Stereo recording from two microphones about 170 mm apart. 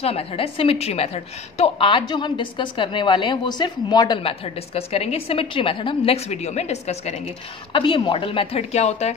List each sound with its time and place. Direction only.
0.0 s a woman's voice: 35° left (ahead or behind)
7.7 s a woman's voice: 30° left (ahead or behind)